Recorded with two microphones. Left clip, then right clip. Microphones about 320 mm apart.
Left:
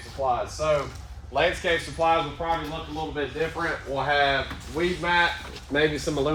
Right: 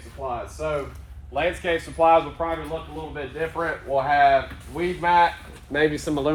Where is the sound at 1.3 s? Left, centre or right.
Centre.